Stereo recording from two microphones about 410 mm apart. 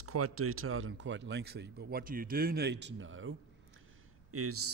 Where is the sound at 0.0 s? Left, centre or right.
Right.